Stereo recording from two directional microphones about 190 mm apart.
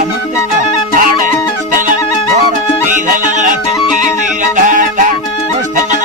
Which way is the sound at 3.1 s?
40° right (ahead or behind).